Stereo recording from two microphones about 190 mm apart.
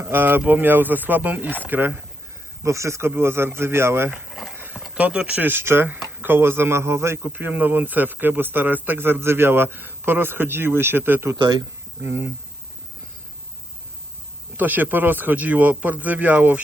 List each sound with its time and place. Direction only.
0.0 s speech: 10° right (ahead or behind)
4.3 s speech: centre (ahead or behind)
11.3 s speech: 25° right (ahead or behind)
12.0 s speech: 10° right (ahead or behind)
14.5 s speech: 10° right (ahead or behind)